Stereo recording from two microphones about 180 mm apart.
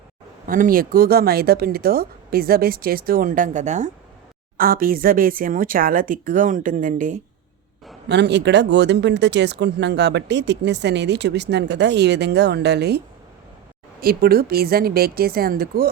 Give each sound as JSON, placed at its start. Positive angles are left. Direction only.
{"t": 0.4, "sound": "speech", "side_deg": -50}
{"t": 4.5, "sound": "speech", "side_deg": -55}
{"t": 8.0, "sound": "speech", "side_deg": -70}
{"t": 14.0, "sound": "speech", "side_deg": -55}